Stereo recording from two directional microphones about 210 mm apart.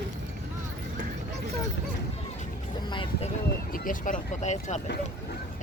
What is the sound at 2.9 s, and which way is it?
Vehicle, 25° left (ahead or behind).